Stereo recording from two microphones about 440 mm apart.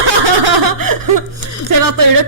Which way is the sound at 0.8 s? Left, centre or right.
Right.